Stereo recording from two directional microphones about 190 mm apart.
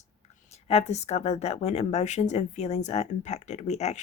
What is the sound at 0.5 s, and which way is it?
A woman's voice, 35° left (ahead or behind).